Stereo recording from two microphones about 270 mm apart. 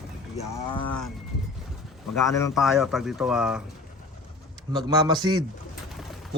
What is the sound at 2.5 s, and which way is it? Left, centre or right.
Speech, centre.